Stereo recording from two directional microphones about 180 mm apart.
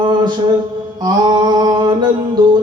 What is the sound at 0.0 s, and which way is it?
Mantra, 25° right (ahead or behind).